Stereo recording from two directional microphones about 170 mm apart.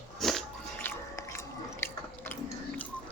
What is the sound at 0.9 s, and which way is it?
Biting, 15° left (ahead or behind).